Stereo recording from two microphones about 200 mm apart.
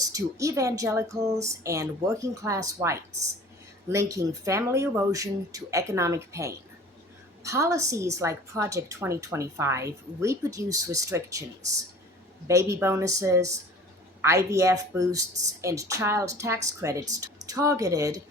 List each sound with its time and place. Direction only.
0.0 s a woman's voice: 15° right (ahead or behind)
12.5 s a woman's voice: 15° right (ahead or behind)